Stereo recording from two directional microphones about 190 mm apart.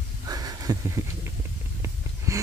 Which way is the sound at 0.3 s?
20° right (ahead or behind).